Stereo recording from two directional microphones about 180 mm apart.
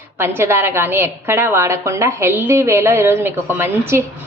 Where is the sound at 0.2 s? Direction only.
15° right (ahead or behind).